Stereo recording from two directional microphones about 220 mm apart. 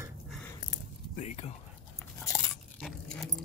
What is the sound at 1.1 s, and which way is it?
Speech, 30° left (ahead or behind).